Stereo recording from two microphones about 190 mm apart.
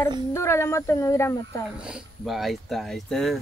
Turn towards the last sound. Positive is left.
turn(degrees=0)  # may be behind; listen again after turning